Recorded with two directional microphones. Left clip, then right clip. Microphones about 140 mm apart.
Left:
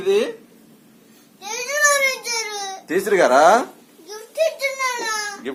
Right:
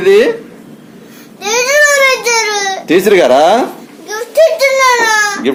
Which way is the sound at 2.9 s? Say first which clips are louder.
Right 8 dB; 35° right (ahead or behind).